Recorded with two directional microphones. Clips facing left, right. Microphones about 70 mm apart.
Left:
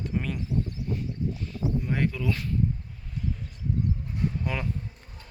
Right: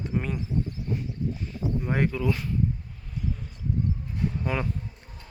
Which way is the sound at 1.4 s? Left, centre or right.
Right.